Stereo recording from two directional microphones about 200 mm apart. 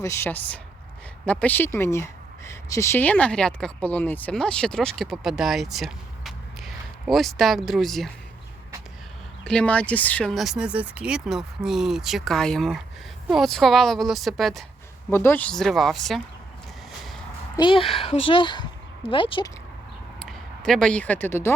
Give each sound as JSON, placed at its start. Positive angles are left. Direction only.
{"t": 0.0, "sound": "speech", "side_deg": 15}
{"t": 9.4, "sound": "speech", "side_deg": 5}
{"t": 15.1, "sound": "speech", "side_deg": 10}
{"t": 17.6, "sound": "speech", "side_deg": 25}
{"t": 20.2, "sound": "speech", "side_deg": 0}